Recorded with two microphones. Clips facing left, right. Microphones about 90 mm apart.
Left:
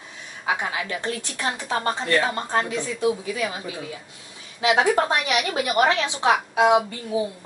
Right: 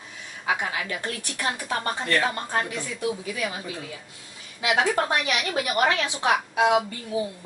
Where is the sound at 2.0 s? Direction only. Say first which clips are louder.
Left 2 dB; 20° left (ahead or behind).